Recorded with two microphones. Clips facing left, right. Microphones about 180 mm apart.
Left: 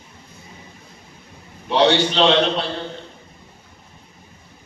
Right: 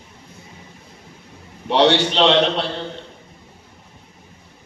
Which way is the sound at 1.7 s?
75° right (ahead or behind).